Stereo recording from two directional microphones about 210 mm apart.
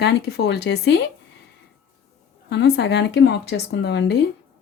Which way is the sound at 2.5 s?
55° left (ahead or behind).